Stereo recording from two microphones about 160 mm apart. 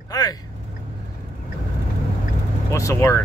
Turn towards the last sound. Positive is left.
turn(degrees=15)  # may be behind; listen again after turning